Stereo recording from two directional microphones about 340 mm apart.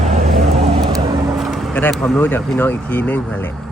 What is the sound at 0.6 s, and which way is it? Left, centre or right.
Speech, centre.